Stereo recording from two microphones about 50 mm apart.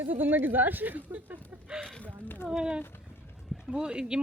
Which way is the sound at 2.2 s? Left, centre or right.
Left.